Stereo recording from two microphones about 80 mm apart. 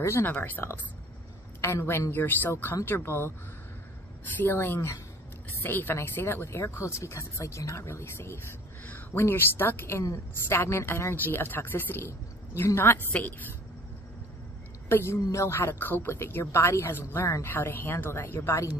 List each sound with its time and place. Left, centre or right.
0.2 s a woman's voice: left
4.4 s a woman's voice: left
8.8 s a woman's voice: left
14.9 s a woman's voice: left